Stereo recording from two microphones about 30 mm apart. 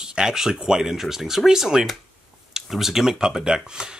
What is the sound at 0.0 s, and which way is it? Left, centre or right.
Speech, right.